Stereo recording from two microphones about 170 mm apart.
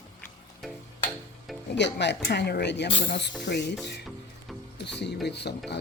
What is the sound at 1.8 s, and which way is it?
Speech, 90° left.